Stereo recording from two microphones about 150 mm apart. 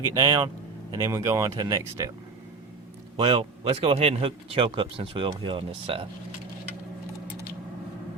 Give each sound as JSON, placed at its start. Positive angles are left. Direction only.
{"t": 0.1, "sound": "speech", "side_deg": -25}
{"t": 3.2, "sound": "speech", "side_deg": -35}